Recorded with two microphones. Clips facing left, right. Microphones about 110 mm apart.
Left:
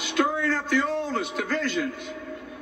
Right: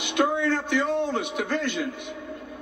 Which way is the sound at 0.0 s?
20° right (ahead or behind).